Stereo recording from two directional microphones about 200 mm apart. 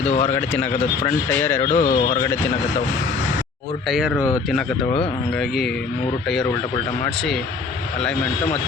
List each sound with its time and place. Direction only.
0.1 s speech: 35° left (ahead or behind)
0.3 s speech: 10° left (ahead or behind)
1.7 s speech: 35° left (ahead or behind)
3.8 s speech: centre (ahead or behind)